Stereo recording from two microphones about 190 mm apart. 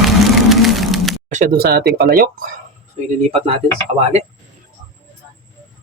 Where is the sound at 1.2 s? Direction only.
45° right (ahead or behind).